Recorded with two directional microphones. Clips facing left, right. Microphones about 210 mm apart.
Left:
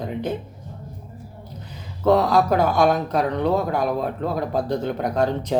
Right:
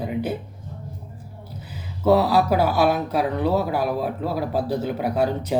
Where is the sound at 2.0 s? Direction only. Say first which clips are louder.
Even; 5° right (ahead or behind).